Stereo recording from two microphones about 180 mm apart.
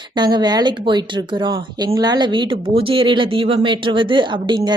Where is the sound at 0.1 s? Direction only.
25° right (ahead or behind).